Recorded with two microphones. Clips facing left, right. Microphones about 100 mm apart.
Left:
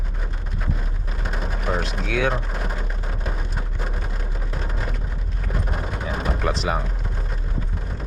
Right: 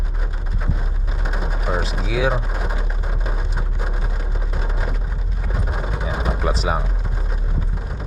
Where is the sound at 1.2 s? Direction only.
5° right (ahead or behind).